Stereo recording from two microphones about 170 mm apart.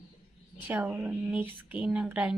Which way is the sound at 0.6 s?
10° right (ahead or behind).